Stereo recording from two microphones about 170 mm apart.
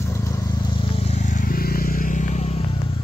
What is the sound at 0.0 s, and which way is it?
Vehicle, 15° left (ahead or behind).